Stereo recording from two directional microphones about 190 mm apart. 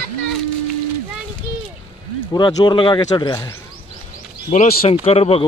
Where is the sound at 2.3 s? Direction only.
20° left (ahead or behind).